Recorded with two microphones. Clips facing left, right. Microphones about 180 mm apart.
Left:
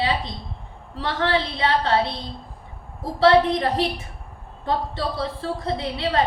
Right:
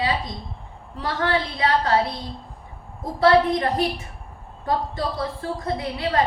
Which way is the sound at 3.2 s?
25° left (ahead or behind).